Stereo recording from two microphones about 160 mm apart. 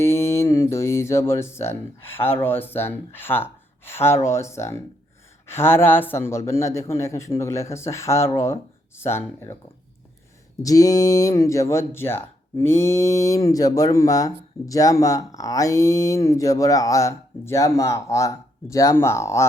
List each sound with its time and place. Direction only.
0.0 s a man's voice: 15° left (ahead or behind)
10.6 s speech: 20° left (ahead or behind)